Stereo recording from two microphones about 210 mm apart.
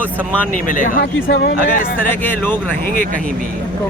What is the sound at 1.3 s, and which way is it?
Speech, 50° left (ahead or behind).